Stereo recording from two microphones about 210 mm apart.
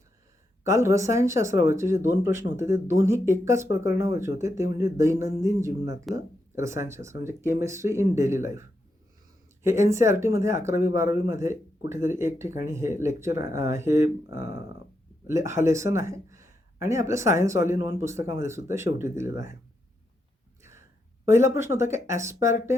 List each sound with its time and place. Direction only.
0.6 s speech: 15° right (ahead or behind)
9.6 s speech: 15° right (ahead or behind)
20.6 s a sound: 10° right (ahead or behind)
21.2 s speech: 10° right (ahead or behind)